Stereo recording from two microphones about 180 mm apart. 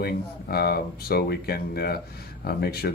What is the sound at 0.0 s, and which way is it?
Speech, 60° left (ahead or behind).